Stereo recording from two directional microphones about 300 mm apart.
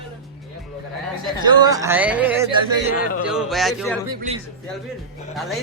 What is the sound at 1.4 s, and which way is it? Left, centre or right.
A man's voice, centre.